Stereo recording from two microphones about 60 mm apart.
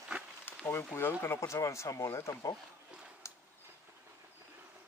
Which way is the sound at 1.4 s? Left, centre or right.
Left.